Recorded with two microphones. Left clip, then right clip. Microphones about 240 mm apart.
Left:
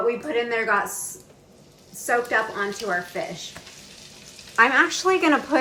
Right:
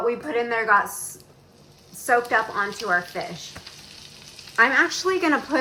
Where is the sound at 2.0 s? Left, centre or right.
Centre.